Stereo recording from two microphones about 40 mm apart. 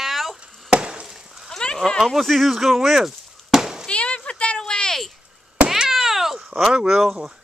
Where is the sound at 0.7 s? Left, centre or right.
Right.